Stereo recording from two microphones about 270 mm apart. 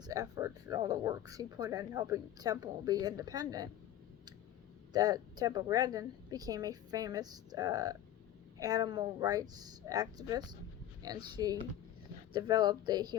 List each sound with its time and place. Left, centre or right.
0.0 s speech: centre
4.9 s speech: centre